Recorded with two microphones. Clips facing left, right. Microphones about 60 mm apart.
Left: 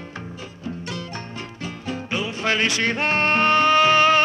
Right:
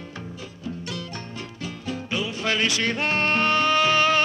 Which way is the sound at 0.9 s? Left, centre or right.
Left.